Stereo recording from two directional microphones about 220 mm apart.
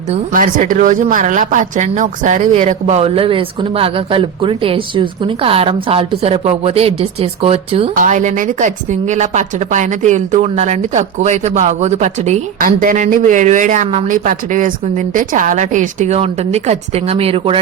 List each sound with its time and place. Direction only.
0.1 s a woman's voice: 35° right (ahead or behind)